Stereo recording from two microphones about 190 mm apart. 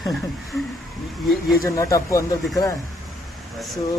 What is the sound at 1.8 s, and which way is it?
Speech, 15° left (ahead or behind).